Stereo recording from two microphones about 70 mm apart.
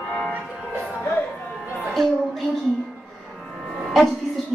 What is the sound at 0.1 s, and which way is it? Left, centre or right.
Music, centre.